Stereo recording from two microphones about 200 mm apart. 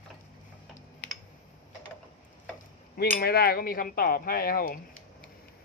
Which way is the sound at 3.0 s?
50° left (ahead or behind).